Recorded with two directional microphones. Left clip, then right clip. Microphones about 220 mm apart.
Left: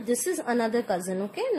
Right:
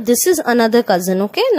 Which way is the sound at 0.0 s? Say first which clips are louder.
Right 13 dB; 35° right (ahead or behind).